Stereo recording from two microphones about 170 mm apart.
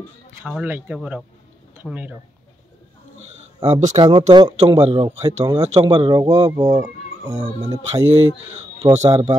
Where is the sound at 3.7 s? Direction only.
45° right (ahead or behind).